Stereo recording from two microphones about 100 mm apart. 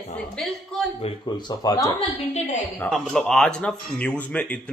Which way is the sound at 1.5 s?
40° left (ahead or behind).